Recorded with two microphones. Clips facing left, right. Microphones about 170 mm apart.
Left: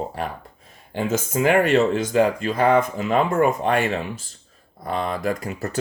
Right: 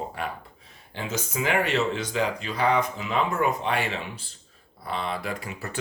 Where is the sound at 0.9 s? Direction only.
50° left (ahead or behind).